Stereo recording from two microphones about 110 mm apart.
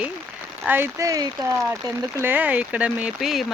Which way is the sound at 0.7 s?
20° right (ahead or behind).